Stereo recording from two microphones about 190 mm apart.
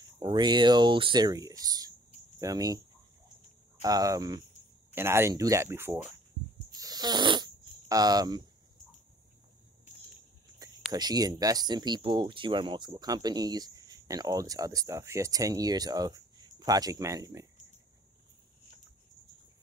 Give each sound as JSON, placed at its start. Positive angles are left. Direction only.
{"t": 0.2, "sound": "speech", "side_deg": -25}
{"t": 3.8, "sound": "speech", "side_deg": -20}
{"t": 6.7, "sound": "fart", "side_deg": -20}
{"t": 10.9, "sound": "speech", "side_deg": -20}